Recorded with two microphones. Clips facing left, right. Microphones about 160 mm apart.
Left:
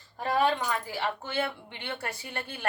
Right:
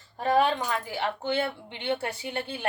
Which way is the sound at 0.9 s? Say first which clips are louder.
Right 4 dB; 20° right (ahead or behind).